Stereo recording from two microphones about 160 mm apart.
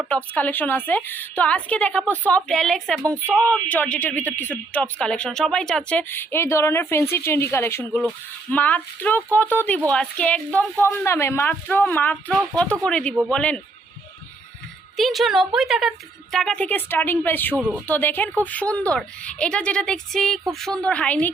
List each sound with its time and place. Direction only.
0.3 s a woman's voice: 10° left (ahead or behind)
14.9 s a woman's voice: centre (ahead or behind)
17.6 s speech: 10° right (ahead or behind)
17.8 s speech: 10° left (ahead or behind)